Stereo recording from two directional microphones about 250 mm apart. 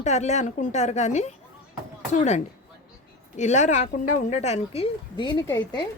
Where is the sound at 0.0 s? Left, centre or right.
Left.